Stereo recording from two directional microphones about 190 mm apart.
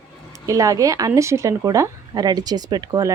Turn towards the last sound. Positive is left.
turn(degrees=-20)  # may be behind; listen again after turning